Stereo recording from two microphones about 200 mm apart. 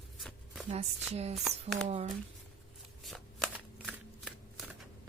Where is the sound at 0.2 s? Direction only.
Centre (ahead or behind).